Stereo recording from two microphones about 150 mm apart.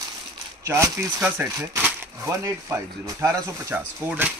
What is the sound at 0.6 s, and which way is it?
Speech, 15° right (ahead or behind).